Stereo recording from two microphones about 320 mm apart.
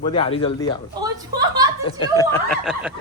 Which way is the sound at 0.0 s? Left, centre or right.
Centre.